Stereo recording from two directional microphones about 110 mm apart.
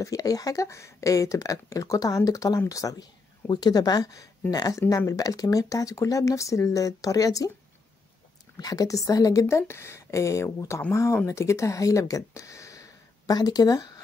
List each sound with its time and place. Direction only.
0.0 s speech: 35° left (ahead or behind)
8.5 s a woman's voice: 35° left (ahead or behind)